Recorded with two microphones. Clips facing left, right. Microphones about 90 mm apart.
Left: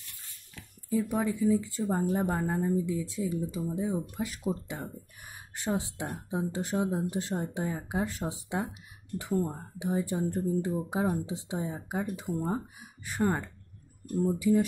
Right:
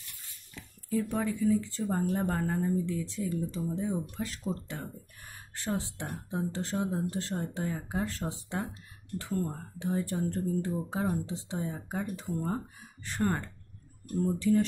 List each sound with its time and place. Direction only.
0.8 s speech: 10° left (ahead or behind)